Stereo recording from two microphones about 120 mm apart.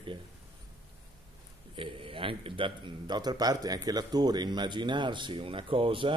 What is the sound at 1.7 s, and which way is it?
A man's voice, 45° right (ahead or behind).